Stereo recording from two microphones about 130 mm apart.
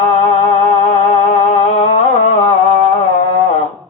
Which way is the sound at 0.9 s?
60° left (ahead or behind).